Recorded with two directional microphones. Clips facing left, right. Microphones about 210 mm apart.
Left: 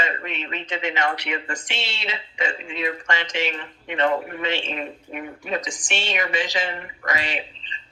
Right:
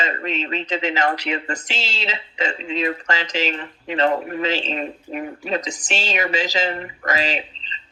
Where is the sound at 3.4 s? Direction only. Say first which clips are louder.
Right 3 dB; 35° right (ahead or behind).